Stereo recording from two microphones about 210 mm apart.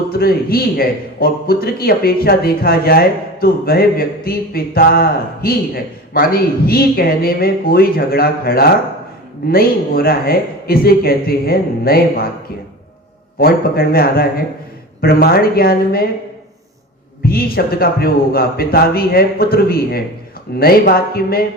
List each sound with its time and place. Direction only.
0.1 s a man's voice: 45° left (ahead or behind)
13.4 s a man's voice: 45° left (ahead or behind)
17.2 s a man's voice: 45° left (ahead or behind)